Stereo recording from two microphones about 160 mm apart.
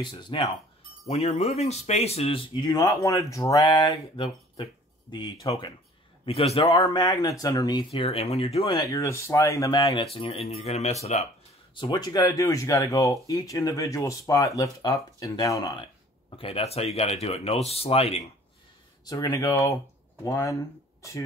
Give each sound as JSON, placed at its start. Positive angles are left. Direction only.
{"t": 0.0, "sound": "speech", "side_deg": 30}
{"t": 6.2, "sound": "speech", "side_deg": 40}
{"t": 6.8, "sound": "speech", "side_deg": 25}
{"t": 7.9, "sound": "speech", "side_deg": 35}
{"t": 8.7, "sound": "speech", "side_deg": 20}
{"t": 10.1, "sound": "speech", "side_deg": 35}
{"t": 11.7, "sound": "speech", "side_deg": 30}
{"t": 16.3, "sound": "speech", "side_deg": 35}
{"t": 19.0, "sound": "speech", "side_deg": 20}